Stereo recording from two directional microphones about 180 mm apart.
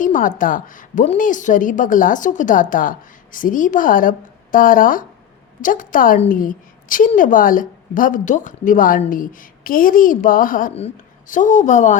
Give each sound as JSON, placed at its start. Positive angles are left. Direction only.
{"t": 0.0, "sound": "a woman's voice", "side_deg": 45}